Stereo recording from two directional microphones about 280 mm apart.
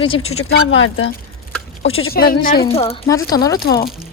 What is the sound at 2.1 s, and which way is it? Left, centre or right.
Speech, left.